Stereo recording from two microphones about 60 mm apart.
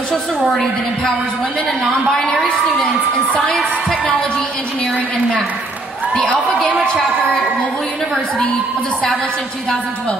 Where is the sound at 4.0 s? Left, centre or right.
Left.